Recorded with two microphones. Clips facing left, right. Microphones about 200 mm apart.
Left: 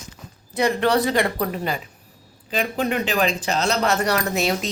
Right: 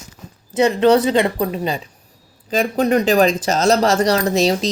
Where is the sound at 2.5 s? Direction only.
45° right (ahead or behind).